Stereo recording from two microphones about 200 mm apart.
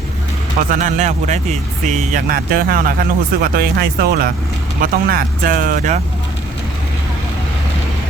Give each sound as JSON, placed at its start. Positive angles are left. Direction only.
{"t": 0.7, "sound": "speech", "side_deg": -40}